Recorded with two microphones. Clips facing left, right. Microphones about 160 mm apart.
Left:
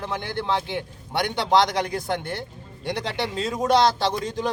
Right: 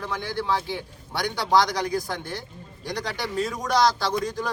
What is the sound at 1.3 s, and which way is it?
Speech, 25° left (ahead or behind).